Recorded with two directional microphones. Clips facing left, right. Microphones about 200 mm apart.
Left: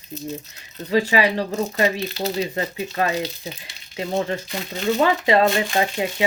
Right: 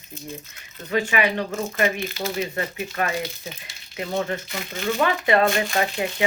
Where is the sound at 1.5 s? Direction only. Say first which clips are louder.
Left 2 dB; 20° left (ahead or behind).